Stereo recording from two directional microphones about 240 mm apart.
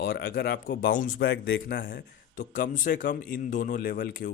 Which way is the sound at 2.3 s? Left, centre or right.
Left.